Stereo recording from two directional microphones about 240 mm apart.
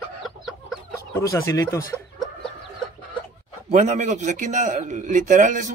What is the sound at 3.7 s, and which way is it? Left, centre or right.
A man's voice, right.